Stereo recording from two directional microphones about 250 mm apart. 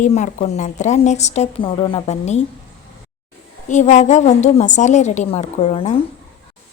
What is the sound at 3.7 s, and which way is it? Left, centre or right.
A woman's voice, left.